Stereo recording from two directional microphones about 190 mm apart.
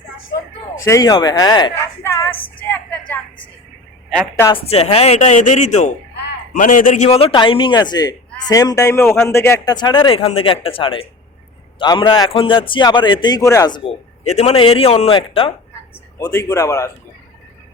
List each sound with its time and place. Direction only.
0.9 s a man's voice: 20° left (ahead or behind)
2.0 s a sound: 15° left (ahead or behind)
4.5 s a man's voice: 30° left (ahead or behind); by 9.7 s 15° left (ahead or behind)
9.7 s a man's voice: 25° left (ahead or behind)
14.3 s speech: 35° left (ahead or behind)
16.1 s a man's voice: 15° left (ahead or behind)